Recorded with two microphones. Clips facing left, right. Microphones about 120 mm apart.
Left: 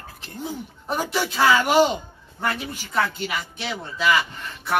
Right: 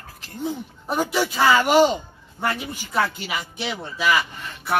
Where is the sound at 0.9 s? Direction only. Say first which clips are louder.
Right 2 dB; centre (ahead or behind).